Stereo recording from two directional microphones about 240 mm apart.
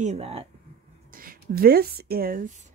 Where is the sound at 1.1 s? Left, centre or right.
Right.